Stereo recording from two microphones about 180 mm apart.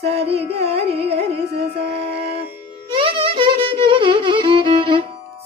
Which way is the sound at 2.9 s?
30° right (ahead or behind).